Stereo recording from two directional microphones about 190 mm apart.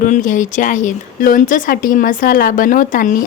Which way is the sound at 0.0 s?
45° left (ahead or behind).